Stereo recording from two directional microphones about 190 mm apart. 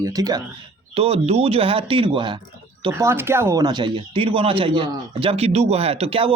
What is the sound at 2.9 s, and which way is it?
Speech, 15° right (ahead or behind).